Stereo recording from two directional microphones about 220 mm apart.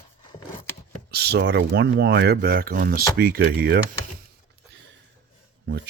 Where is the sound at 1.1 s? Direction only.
45° right (ahead or behind).